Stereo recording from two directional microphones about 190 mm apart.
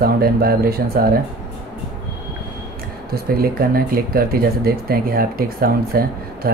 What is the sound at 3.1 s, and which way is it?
Speech, 50° right (ahead or behind).